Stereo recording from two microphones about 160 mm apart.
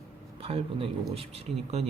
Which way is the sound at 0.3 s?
35° right (ahead or behind).